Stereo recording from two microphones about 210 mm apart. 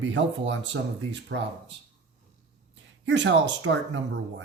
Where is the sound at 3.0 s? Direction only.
60° right (ahead or behind).